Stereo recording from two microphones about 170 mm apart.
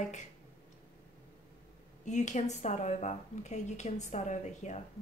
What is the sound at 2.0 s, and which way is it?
Speech, 45° left (ahead or behind).